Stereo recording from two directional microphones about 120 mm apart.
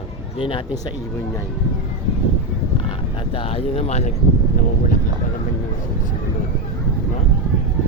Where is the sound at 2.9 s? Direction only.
45° left (ahead or behind); by 4.1 s 65° left (ahead or behind).